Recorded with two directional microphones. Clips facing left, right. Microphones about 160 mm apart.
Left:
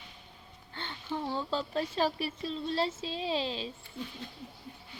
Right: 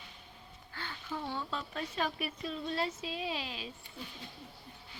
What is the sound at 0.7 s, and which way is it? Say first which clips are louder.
A woman's voice: left 4 dB; 25° left (ahead or behind).